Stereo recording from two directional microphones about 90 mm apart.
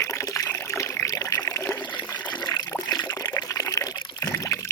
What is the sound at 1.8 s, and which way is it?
Water, 55° left (ahead or behind).